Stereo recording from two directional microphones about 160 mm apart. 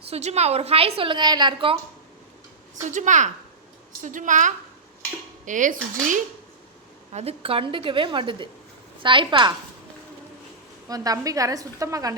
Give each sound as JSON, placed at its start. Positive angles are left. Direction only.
{"t": 0.1, "sound": "a woman's voice", "side_deg": -45}
{"t": 2.9, "sound": "dishes", "side_deg": -50}
{"t": 7.1, "sound": "a woman's voice", "side_deg": -40}
{"t": 10.8, "sound": "a woman's voice", "side_deg": -20}